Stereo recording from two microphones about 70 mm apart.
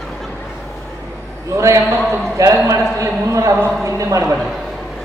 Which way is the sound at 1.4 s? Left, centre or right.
Right.